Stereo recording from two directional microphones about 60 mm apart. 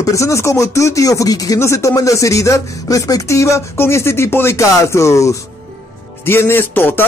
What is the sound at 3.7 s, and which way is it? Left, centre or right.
Speech, left.